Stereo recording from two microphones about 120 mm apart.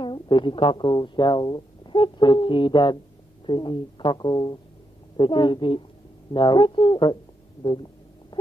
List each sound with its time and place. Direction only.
0.0 s a woman's voice: 40° left (ahead or behind)